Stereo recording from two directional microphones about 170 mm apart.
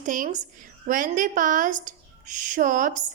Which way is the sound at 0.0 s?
50° right (ahead or behind).